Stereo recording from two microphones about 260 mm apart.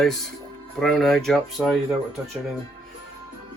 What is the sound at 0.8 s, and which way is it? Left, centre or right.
A man's voice, centre.